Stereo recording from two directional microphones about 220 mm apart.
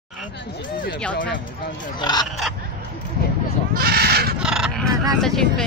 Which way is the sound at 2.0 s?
20° left (ahead or behind).